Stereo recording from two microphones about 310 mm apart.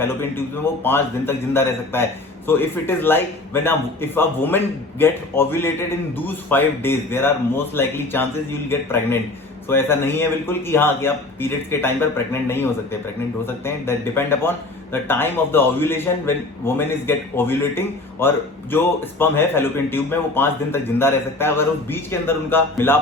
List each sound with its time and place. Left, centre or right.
0.0 s a man's voice: centre